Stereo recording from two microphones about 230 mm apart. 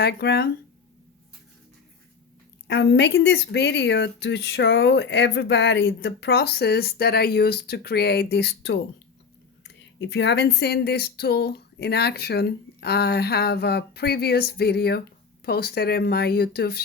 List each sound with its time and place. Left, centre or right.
0.0 s speech: left
2.6 s speech: left
10.0 s speech: left